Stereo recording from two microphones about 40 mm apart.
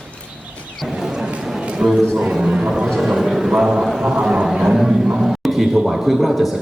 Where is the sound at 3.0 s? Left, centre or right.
Centre.